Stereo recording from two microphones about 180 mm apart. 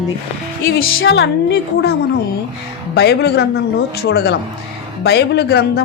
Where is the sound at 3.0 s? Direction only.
65° left (ahead or behind).